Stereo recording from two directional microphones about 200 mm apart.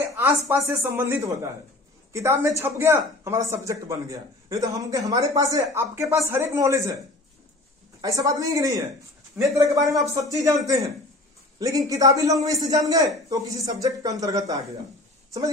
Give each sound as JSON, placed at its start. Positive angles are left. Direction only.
{"t": 0.5, "sound": "speech", "side_deg": -10}
{"t": 8.0, "sound": "a man's voice", "side_deg": -15}